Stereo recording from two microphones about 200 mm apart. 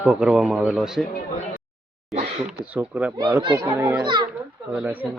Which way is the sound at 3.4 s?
15° right (ahead or behind).